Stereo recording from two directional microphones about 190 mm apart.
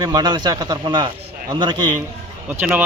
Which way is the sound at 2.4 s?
10° right (ahead or behind).